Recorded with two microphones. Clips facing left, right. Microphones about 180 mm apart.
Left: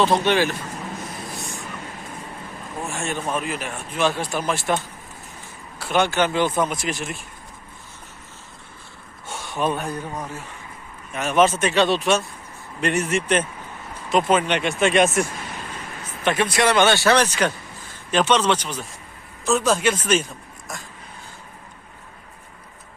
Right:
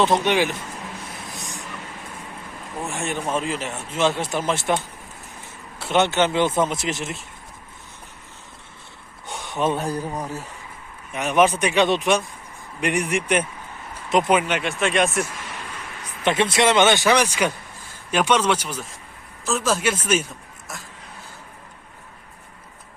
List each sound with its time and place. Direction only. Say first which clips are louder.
0.0 s speech: even; 15° right (ahead or behind)
2.8 s speech: right 1 dB; 20° right (ahead or behind)
5.8 s speech: right 1 dB; 20° right (ahead or behind)
9.2 s a sound: right 1 dB; 20° right (ahead or behind)
9.8 s speech: right 3 dB; 35° right (ahead or behind)
11.1 s speech: even; 15° right (ahead or behind); by 15.2 s centre (ahead or behind)
16.2 s speech: right 1 dB; 25° right (ahead or behind); by 20.8 s 5° right (ahead or behind)